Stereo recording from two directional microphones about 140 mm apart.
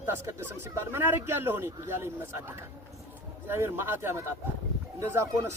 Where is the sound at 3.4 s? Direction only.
15° right (ahead or behind).